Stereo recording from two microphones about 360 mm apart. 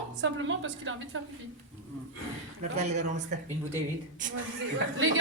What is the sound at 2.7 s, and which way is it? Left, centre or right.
Speech, centre.